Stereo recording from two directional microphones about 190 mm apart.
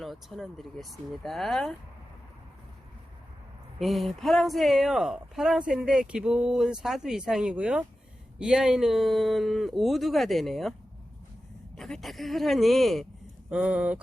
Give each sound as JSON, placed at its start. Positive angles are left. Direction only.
{"t": 0.0, "sound": "speech", "side_deg": 0}
{"t": 3.8, "sound": "speech", "side_deg": 0}
{"t": 11.8, "sound": "speech", "side_deg": 0}